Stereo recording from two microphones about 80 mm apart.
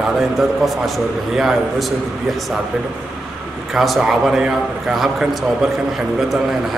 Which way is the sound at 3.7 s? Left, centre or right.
Centre.